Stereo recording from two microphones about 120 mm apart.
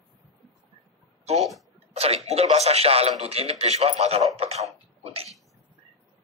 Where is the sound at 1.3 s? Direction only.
60° right (ahead or behind).